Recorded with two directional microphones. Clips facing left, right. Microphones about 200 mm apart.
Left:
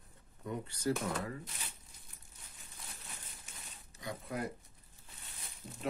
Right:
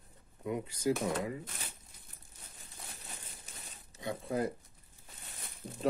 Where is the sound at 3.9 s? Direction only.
25° right (ahead or behind).